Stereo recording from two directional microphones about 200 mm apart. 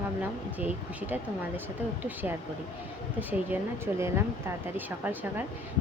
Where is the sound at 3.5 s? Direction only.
10° right (ahead or behind).